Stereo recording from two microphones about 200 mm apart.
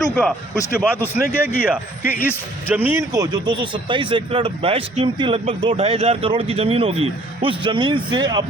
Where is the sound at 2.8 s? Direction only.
15° right (ahead or behind).